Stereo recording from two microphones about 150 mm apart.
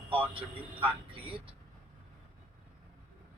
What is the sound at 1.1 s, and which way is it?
Speech, 40° right (ahead or behind).